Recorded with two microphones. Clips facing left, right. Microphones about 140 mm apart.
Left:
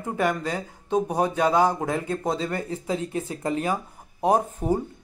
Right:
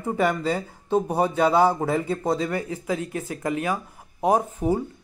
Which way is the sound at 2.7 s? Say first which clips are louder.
Even; 30° left (ahead or behind).